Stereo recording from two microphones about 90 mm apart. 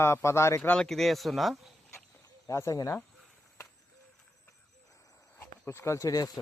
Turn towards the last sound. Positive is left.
turn(degrees=40)  # may be behind; listen again after turning